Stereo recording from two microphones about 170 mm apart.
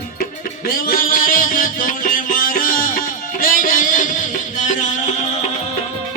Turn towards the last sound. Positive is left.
turn(degrees=45)  # may be behind; listen again after turning